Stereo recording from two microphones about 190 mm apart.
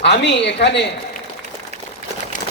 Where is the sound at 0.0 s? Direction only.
65° left (ahead or behind).